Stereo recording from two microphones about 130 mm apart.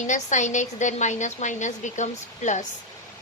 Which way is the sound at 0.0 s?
70° left (ahead or behind).